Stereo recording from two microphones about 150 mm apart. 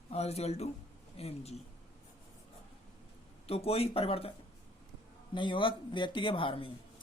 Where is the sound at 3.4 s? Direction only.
40° left (ahead or behind).